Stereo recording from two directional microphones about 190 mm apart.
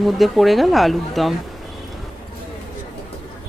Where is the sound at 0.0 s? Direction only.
Centre (ahead or behind).